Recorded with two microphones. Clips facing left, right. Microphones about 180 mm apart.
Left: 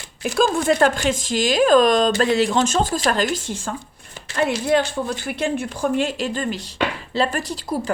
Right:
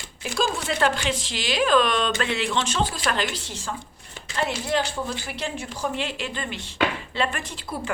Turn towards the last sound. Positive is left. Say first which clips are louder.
# left 7 dB
turn(degrees=40)  # may be behind; listen again after turning